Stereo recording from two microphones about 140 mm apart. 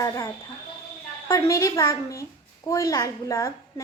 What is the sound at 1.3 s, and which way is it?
Speech, 20° left (ahead or behind).